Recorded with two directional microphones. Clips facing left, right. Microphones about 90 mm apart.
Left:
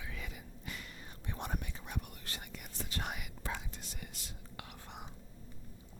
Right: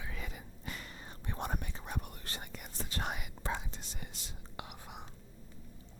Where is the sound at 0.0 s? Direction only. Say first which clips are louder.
Right 2 dB; 35° right (ahead or behind).